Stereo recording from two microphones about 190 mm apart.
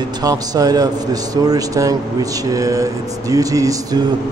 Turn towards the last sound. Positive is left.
turn(degrees=-20)  # may be behind; listen again after turning